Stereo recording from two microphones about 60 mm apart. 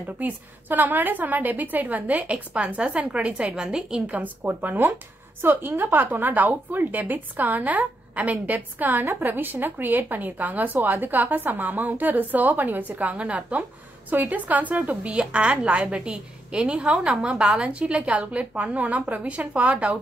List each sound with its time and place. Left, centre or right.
0.0 s a woman's voice: right; by 4.0 s centre
4.1 s a woman's voice: right